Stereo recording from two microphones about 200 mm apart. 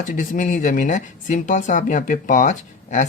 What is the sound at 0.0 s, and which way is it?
Speech, 40° left (ahead or behind).